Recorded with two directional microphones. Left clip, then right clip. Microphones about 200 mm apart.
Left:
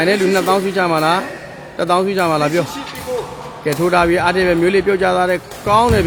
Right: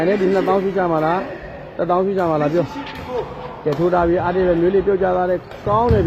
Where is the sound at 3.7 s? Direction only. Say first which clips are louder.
Left 3 dB; 30° left (ahead or behind).